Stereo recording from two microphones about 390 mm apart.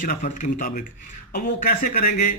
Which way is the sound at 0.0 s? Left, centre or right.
Centre.